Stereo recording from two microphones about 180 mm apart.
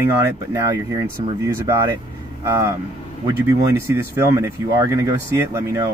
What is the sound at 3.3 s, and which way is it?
Speech, 20° right (ahead or behind).